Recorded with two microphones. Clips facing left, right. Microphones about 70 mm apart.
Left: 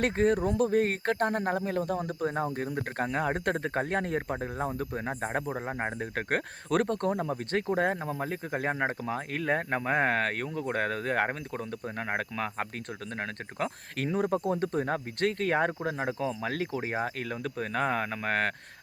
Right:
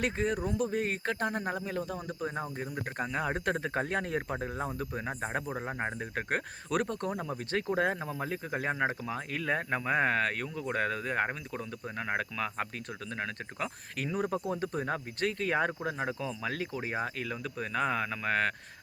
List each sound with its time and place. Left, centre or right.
0.0 s speech: left
4.4 s speech: left
5.5 s speech: centre
6.0 s speech: left
11.3 s speech: left
14.1 s speech: left
14.8 s speech: left